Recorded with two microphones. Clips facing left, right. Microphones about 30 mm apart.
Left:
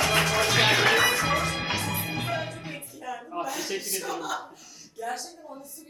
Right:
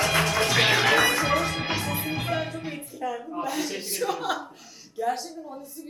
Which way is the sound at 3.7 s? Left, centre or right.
Centre.